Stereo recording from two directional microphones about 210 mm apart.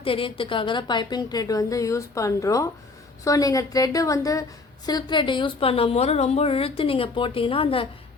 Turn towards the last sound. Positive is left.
turn(degrees=25)  # may be behind; listen again after turning